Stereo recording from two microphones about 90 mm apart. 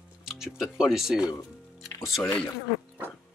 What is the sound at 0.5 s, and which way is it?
Speech, 5° right (ahead or behind).